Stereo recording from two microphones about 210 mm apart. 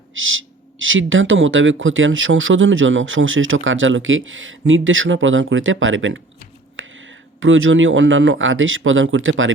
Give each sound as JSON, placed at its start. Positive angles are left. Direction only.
{"t": 0.1, "sound": "speech", "side_deg": -70}